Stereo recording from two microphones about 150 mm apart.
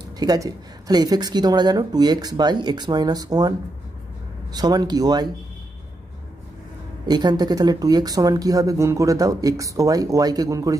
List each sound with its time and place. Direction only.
0.2 s speech: 25° right (ahead or behind)
7.1 s speech: 30° right (ahead or behind)